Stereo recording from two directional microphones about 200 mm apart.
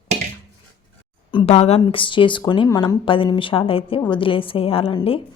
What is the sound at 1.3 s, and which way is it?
Speech, 30° left (ahead or behind).